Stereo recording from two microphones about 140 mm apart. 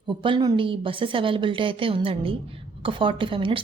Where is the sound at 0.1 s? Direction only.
35° right (ahead or behind).